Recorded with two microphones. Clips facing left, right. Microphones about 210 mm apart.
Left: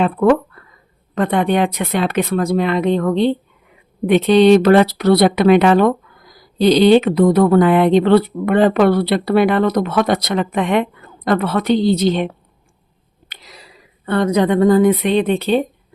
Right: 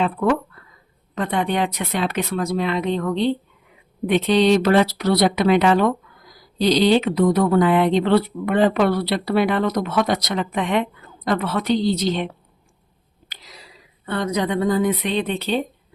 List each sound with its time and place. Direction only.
0.0 s speech: 55° left (ahead or behind)
13.3 s a sound: 60° left (ahead or behind)
14.0 s speech: 60° left (ahead or behind)